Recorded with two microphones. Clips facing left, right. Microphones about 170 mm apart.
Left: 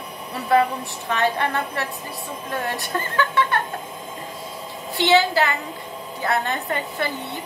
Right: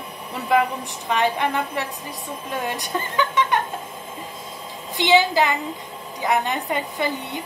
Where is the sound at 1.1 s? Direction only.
15° right (ahead or behind).